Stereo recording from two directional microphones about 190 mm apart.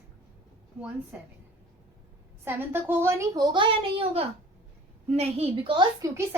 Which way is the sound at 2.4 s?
10° right (ahead or behind).